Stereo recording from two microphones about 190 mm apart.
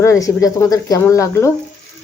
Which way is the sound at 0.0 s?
15° left (ahead or behind).